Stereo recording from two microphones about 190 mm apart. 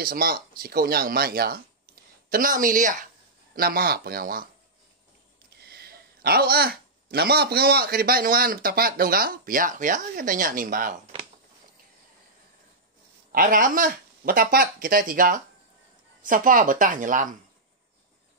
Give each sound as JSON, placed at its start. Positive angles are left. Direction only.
{"t": 0.0, "sound": "speech", "side_deg": -50}
{"t": 5.6, "sound": "speech", "side_deg": -55}
{"t": 13.3, "sound": "speech", "side_deg": -45}